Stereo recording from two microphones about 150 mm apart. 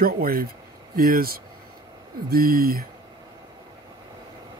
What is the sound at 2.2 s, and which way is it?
Speech, 90° right.